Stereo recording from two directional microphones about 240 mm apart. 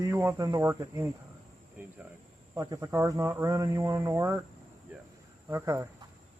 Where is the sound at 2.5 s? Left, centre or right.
Centre.